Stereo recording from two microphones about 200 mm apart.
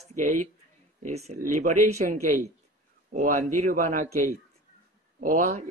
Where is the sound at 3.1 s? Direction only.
40° right (ahead or behind).